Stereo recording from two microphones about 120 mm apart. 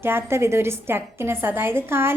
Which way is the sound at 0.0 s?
20° right (ahead or behind).